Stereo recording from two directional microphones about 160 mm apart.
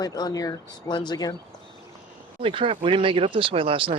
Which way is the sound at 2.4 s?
35° right (ahead or behind).